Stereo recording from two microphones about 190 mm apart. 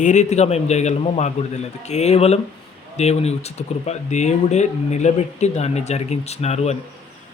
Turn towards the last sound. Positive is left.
turn(degrees=35)  # may be behind; listen again after turning